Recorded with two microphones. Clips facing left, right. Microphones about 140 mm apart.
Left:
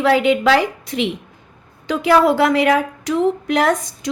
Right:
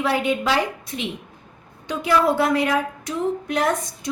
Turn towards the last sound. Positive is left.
turn(degrees=90)